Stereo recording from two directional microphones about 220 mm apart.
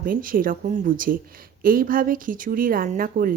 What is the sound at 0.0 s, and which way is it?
Speech, 40° right (ahead or behind).